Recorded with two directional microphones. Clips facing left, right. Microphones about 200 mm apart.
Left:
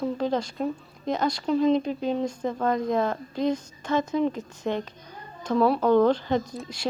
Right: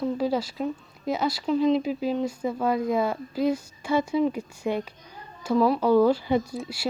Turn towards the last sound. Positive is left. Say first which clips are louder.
# right 1 dB
turn(degrees=-5)  # may be behind; listen again after turning